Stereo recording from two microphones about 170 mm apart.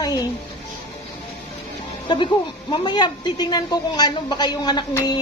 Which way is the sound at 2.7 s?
25° left (ahead or behind).